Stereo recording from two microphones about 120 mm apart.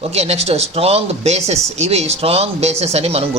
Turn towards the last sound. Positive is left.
turn(degrees=-60)  # may be behind; listen again after turning